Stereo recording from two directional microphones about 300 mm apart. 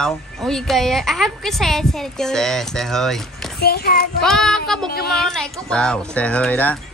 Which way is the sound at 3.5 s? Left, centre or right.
Left.